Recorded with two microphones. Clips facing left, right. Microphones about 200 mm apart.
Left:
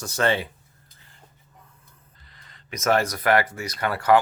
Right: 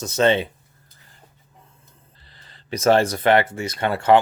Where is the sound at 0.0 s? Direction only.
20° right (ahead or behind).